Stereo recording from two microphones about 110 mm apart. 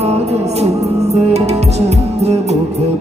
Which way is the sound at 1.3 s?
75° right (ahead or behind).